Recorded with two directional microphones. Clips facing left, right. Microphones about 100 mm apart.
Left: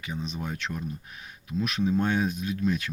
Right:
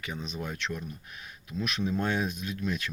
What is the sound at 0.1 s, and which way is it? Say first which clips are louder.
Speech: left 3 dB; 5° left (ahead or behind).